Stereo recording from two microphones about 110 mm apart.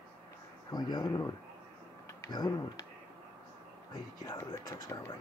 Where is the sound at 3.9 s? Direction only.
40° left (ahead or behind).